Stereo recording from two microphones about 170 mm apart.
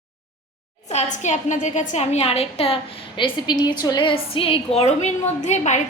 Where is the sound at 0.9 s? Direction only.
40° left (ahead or behind).